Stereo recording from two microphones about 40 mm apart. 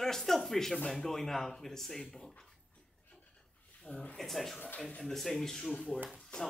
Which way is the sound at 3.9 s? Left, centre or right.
Left.